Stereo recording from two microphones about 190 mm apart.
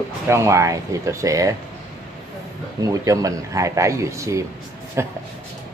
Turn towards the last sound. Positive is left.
turn(degrees=-15)  # may be behind; listen again after turning